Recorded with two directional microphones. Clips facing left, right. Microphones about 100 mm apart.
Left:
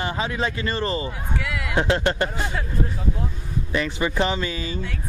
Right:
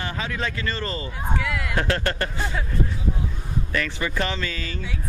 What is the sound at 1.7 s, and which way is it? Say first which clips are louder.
Speech: left 5 dB; 20° left (ahead or behind).